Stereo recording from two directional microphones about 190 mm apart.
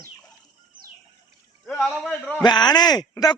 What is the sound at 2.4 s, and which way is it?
Speech, 20° left (ahead or behind).